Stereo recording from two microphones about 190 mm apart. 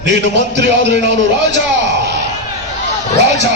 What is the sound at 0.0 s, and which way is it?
A man's voice, 70° right (ahead or behind).